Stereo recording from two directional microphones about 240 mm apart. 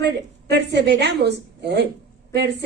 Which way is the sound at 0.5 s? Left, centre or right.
Right.